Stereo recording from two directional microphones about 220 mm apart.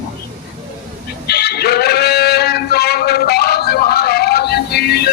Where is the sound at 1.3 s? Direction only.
45° left (ahead or behind).